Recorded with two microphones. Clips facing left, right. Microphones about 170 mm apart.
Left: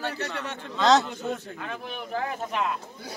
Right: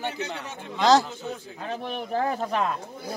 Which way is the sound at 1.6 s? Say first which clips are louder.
Right 6 dB; 35° right (ahead or behind).